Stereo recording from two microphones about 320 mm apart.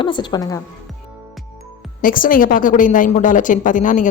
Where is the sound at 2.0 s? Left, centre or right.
Left.